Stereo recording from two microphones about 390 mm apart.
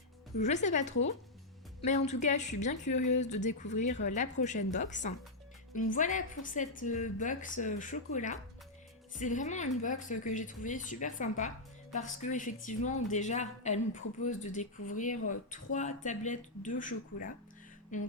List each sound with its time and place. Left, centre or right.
0.3 s a woman's voice: centre
17.9 s a woman's voice: centre